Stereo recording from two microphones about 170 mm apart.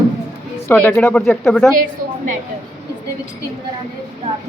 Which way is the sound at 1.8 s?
50° right (ahead or behind).